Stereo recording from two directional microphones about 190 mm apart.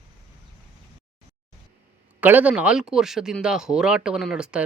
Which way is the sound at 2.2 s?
10° right (ahead or behind).